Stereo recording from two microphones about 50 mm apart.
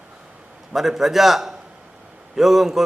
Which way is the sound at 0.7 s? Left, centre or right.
Centre.